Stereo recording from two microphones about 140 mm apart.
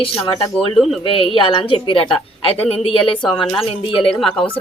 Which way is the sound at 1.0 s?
40° left (ahead or behind).